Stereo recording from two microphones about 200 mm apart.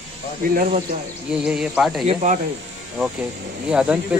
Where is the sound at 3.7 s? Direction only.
5° right (ahead or behind).